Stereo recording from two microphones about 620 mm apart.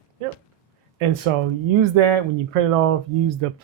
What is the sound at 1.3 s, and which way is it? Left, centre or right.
Speech, right.